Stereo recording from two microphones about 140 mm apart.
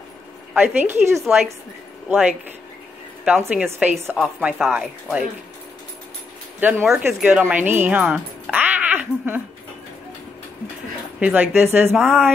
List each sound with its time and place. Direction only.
0.6 s speech: 15° right (ahead or behind)
3.5 s speech: 10° right (ahead or behind)
6.6 s speech: 5° right (ahead or behind)
11.1 s speech: 10° right (ahead or behind)
11.9 s speech: centre (ahead or behind)